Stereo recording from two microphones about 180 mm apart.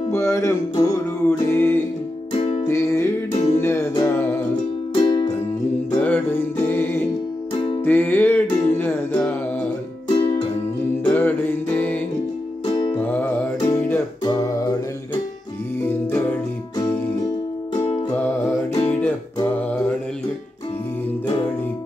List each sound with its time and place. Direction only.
0.1 s music: 15° left (ahead or behind)
2.3 s music: 30° left (ahead or behind)
2.6 s music: 15° left (ahead or behind)
4.9 s music: 25° left (ahead or behind)
5.9 s music: 10° left (ahead or behind)
10.0 s music: 25° left (ahead or behind)
11.1 s music: 10° left (ahead or behind)
12.6 s music: 25° left (ahead or behind)
12.9 s music: 10° left (ahead or behind)
15.8 s music: 15° left (ahead or behind)
18.9 s music: 10° left (ahead or behind)